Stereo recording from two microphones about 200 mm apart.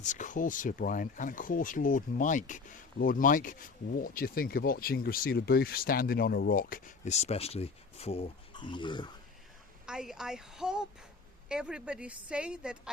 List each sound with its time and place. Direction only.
0.0 s speech: 40° left (ahead or behind); by 9.1 s 20° left (ahead or behind)
9.8 s a woman's voice: 5° right (ahead or behind)